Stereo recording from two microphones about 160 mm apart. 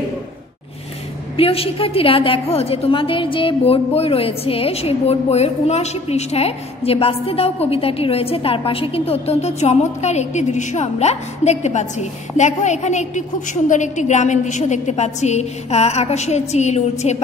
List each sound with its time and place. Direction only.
1.3 s a woman's voice: 35° left (ahead or behind)